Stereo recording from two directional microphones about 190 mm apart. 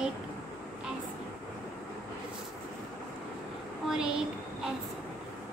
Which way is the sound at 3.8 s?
5° right (ahead or behind).